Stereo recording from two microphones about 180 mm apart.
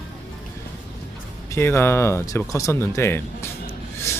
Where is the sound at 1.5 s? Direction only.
15° left (ahead or behind).